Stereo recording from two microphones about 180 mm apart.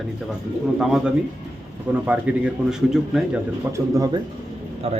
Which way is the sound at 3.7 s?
20° right (ahead or behind).